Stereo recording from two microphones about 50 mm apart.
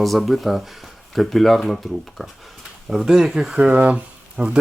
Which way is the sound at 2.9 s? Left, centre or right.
Centre.